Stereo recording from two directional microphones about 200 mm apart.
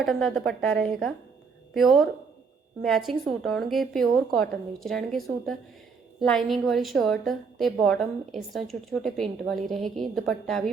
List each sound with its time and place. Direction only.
0.0 s a woman's voice: centre (ahead or behind)